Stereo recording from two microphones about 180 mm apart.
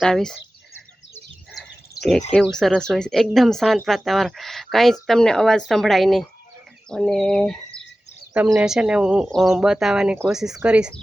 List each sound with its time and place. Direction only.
0.0 s speech: 5° left (ahead or behind)
1.5 s a sound: centre (ahead or behind)
2.3 s speech: 5° left (ahead or behind)
8.3 s speech: 15° right (ahead or behind)
8.5 s speech: 5° right (ahead or behind)